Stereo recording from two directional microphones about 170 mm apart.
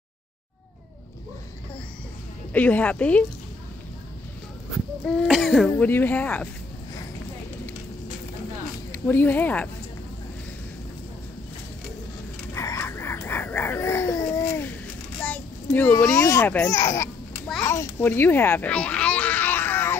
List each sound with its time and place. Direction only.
2.5 s speech: 10° left (ahead or behind)
5.0 s throat clearing: 5° left (ahead or behind)
5.7 s speech: 10° left (ahead or behind)
8.9 s speech: 10° left (ahead or behind)
12.5 s a sound: 20° left (ahead or behind)
16.1 s speech: 20° left (ahead or behind)
17.6 s a sound: 15° left (ahead or behind)